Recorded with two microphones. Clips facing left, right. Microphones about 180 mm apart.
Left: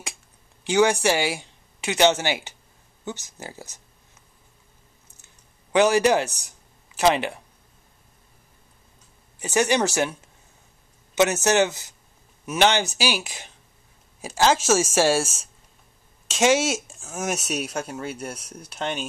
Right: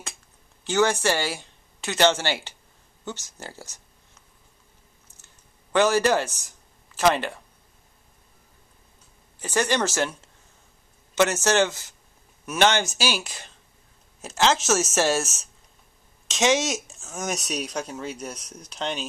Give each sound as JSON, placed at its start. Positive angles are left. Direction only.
{"t": 0.7, "sound": "speech", "side_deg": 15}
{"t": 5.7, "sound": "speech", "side_deg": 15}
{"t": 9.4, "sound": "speech", "side_deg": 15}
{"t": 11.1, "sound": "speech", "side_deg": 15}